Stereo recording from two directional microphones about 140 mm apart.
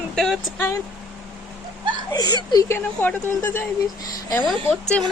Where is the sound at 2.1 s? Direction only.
30° left (ahead or behind).